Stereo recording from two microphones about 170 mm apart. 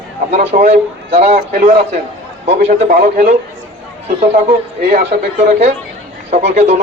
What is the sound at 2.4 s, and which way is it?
Speech, 40° right (ahead or behind).